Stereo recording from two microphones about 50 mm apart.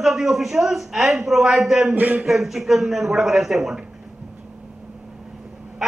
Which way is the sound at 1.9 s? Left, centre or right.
Right.